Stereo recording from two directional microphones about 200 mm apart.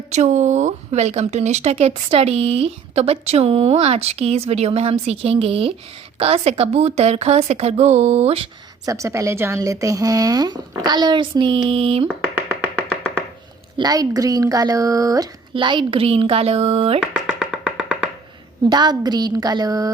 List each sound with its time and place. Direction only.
0.1 s speech: 35° right (ahead or behind)
8.9 s a woman's voice: 15° right (ahead or behind)
12.0 s music: 10° right (ahead or behind)
13.7 s a woman's voice: 20° right (ahead or behind)
17.0 s music: 5° right (ahead or behind)
18.7 s a woman's voice: 20° right (ahead or behind)